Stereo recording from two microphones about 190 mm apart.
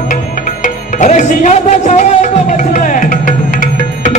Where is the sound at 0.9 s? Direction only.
40° left (ahead or behind).